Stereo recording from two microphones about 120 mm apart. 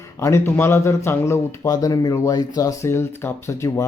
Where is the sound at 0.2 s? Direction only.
20° left (ahead or behind).